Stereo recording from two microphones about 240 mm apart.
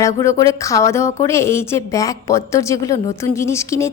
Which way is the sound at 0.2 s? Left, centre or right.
Centre.